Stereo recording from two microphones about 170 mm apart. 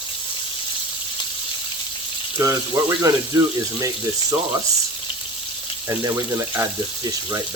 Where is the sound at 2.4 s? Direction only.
20° right (ahead or behind).